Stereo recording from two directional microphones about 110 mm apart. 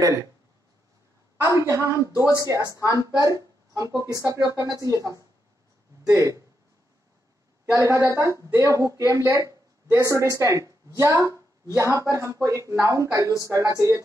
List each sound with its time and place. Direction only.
0.0 s speech: 30° right (ahead or behind)
1.4 s a woman's voice: 25° right (ahead or behind)
7.7 s a woman's voice: 30° right (ahead or behind)